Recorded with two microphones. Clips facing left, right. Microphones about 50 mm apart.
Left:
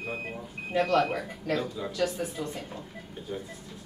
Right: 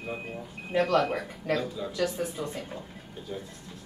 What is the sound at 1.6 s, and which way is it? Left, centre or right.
Speech, centre.